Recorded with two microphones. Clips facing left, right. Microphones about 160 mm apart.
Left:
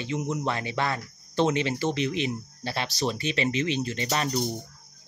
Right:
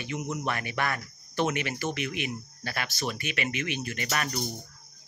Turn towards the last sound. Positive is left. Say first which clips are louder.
# left 4 dB
turn(degrees=25)  # may be behind; listen again after turning